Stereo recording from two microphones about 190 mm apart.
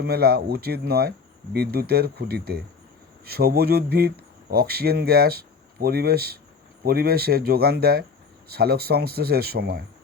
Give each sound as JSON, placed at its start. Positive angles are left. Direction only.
{"t": 0.0, "sound": "speech", "side_deg": -55}